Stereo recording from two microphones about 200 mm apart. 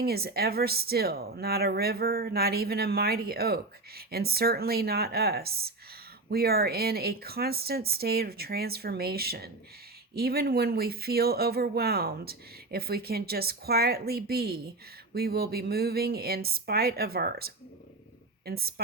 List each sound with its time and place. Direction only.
0.0 s speech: 50° right (ahead or behind)